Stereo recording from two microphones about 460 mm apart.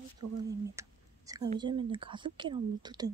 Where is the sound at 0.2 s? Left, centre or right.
Right.